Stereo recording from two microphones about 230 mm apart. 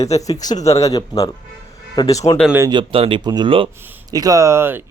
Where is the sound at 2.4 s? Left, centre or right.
Centre.